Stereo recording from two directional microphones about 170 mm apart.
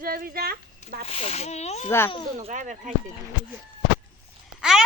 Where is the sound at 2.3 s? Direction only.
45° right (ahead or behind).